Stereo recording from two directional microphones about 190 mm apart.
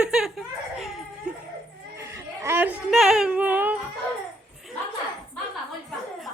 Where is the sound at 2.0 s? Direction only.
15° right (ahead or behind).